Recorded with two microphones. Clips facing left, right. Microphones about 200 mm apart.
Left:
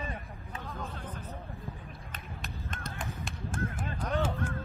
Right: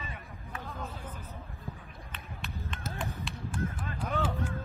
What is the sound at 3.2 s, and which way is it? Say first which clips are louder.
Honk: left 2 dB; 45° left (ahead or behind).